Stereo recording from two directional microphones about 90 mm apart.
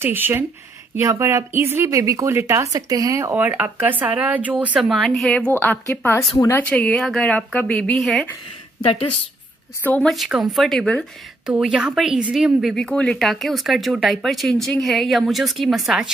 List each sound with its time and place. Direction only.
0.0 s speech: 25° right (ahead or behind)
3.3 s a woman's voice: 20° right (ahead or behind)
4.8 s speech: centre (ahead or behind)
5.9 s a woman's voice: 30° left (ahead or behind)
6.7 s speech: 10° left (ahead or behind)
8.0 s speech: centre (ahead or behind)
10.0 s a woman's voice: centre (ahead or behind)
12.7 s speech: 10° left (ahead or behind)